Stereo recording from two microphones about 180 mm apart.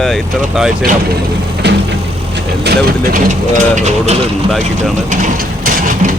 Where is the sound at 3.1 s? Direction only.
40° right (ahead or behind).